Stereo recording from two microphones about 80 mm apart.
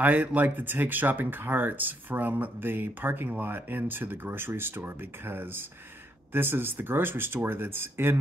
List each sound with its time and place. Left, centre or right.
0.0 s speech: right